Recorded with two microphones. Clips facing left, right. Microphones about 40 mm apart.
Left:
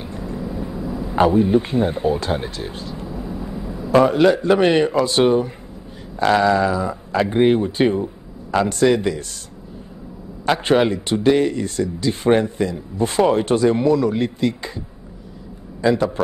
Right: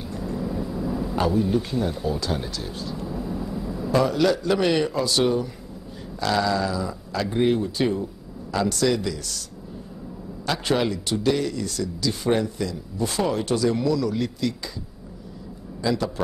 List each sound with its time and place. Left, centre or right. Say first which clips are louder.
0.0 s a sound: left 1 dB; left
5.0 s a man's voice: left 6 dB; left
15.8 s a man's voice: left 7 dB; left